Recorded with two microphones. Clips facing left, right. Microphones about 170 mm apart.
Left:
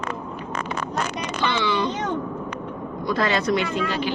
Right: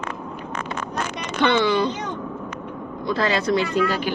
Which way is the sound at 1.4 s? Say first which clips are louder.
Right 5 dB; 50° right (ahead or behind).